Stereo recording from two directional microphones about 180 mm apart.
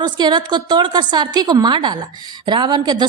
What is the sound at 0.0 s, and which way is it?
A woman's voice, 25° right (ahead or behind).